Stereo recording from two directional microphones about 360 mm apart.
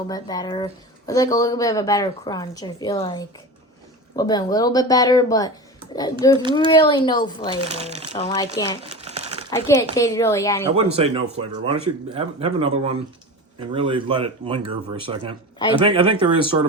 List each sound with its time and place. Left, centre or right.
0.1 s speech: centre
7.7 s speech: centre
8.1 s speech: centre
8.8 s crumpling: centre
9.5 s speech: centre
10.8 s speech: centre
15.5 s a man's voice: centre
15.8 s speech: centre